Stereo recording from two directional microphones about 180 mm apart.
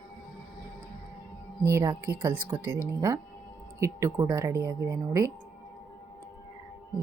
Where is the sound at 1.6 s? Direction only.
15° right (ahead or behind).